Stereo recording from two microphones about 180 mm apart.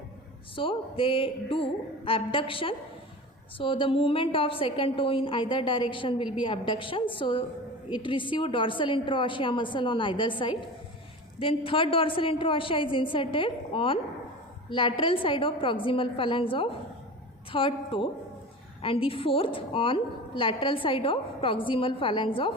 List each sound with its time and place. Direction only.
0.5 s a woman's voice: 30° left (ahead or behind)